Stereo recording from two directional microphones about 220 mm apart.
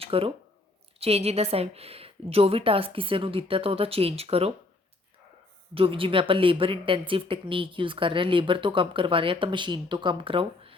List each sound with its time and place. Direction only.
0.0 s speech: 25° right (ahead or behind)
5.7 s speech: 25° right (ahead or behind)